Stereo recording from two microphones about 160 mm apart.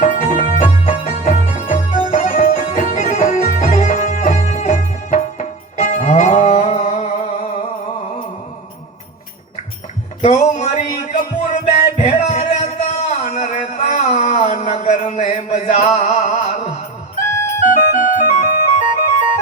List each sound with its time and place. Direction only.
0.0 s music: 50° left (ahead or behind)
10.2 s music: 45° left (ahead or behind)
17.7 s music: 55° left (ahead or behind)